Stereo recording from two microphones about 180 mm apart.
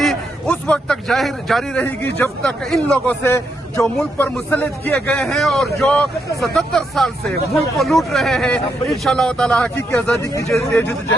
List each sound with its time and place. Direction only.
0.0 s a man's voice: 5° left (ahead or behind)